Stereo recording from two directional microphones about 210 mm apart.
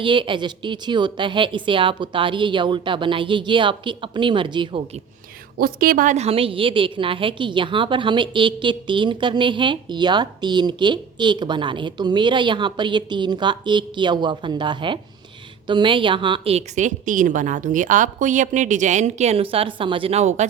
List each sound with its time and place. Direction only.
0.0 s a woman's voice: 25° right (ahead or behind)
5.5 s a woman's voice: 45° right (ahead or behind)